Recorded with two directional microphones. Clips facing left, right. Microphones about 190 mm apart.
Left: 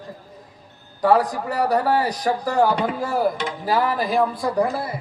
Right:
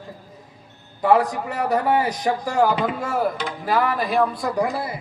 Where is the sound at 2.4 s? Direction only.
10° right (ahead or behind).